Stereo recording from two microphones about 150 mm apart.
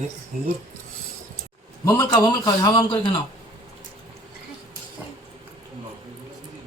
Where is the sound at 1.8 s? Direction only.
25° left (ahead or behind).